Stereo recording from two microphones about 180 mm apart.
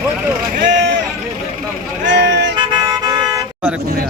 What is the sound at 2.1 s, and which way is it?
Music, 75° right (ahead or behind).